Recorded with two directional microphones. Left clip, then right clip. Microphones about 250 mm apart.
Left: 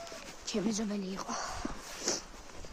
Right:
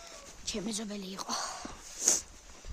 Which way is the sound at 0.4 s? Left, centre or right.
Centre.